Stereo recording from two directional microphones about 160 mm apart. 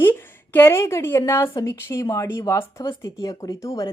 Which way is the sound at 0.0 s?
15° left (ahead or behind).